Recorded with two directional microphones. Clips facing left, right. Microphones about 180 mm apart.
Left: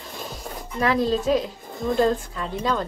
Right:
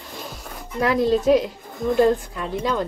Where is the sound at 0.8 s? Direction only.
15° right (ahead or behind).